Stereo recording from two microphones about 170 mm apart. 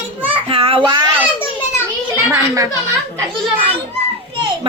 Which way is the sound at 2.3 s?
20° right (ahead or behind).